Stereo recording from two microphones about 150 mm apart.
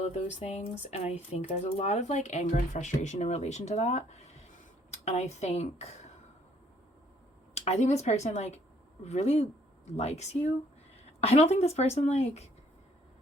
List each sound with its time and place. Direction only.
0.0 s speech: 50° left (ahead or behind)
7.5 s speech: 45° left (ahead or behind)